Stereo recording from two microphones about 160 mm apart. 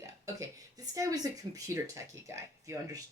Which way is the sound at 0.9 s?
20° right (ahead or behind).